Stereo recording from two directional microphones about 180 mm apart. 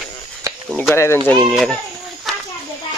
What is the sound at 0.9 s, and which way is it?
Speech, 15° left (ahead or behind).